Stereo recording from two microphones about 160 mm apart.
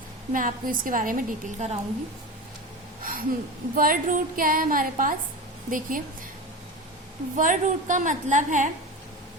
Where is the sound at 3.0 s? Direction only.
60° right (ahead or behind).